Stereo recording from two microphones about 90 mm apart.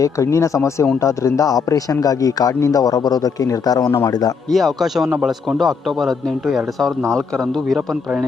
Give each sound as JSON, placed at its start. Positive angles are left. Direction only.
{"t": 0.0, "sound": "speech", "side_deg": 35}
{"t": 4.5, "sound": "a man's voice", "side_deg": 0}